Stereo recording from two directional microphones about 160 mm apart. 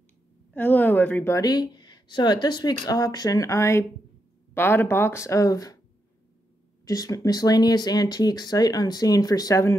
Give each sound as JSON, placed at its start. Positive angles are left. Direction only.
{"t": 0.5, "sound": "a woman's voice", "side_deg": 10}
{"t": 6.8, "sound": "speech", "side_deg": 20}